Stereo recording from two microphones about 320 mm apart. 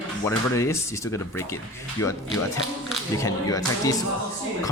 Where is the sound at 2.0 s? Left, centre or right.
Left.